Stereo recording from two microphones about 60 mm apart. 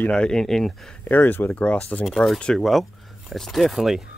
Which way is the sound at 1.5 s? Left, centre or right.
Left.